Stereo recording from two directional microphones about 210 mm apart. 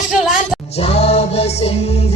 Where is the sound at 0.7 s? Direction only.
30° left (ahead or behind).